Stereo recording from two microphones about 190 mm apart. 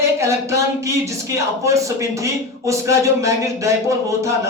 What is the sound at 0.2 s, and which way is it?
Speech, 15° right (ahead or behind).